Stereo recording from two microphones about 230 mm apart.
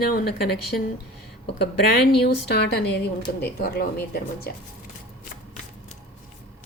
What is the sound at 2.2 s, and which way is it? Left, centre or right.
Speech, left.